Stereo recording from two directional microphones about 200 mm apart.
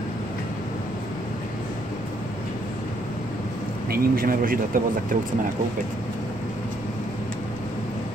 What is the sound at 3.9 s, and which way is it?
Speech, 45° right (ahead or behind).